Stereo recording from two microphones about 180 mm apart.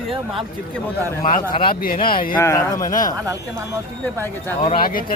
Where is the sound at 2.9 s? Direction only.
45° left (ahead or behind).